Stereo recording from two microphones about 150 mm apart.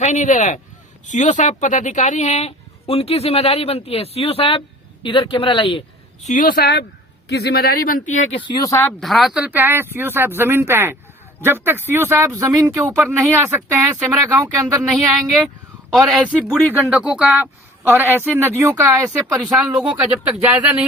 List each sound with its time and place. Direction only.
0.0 s speech: 55° left (ahead or behind); by 5.8 s 35° left (ahead or behind)
6.2 s speech: 60° left (ahead or behind)
8.4 s speech: 30° left (ahead or behind)
9.0 s speech: centre (ahead or behind); by 14.8 s 20° right (ahead or behind)
15.9 s a man's voice: 5° right (ahead or behind)
16.5 s speech: 5° left (ahead or behind)
16.7 s speech: 10° right (ahead or behind)
18.9 s a man's voice: 5° right (ahead or behind)